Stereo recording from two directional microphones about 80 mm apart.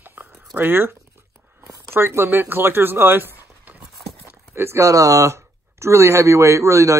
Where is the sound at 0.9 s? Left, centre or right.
Right.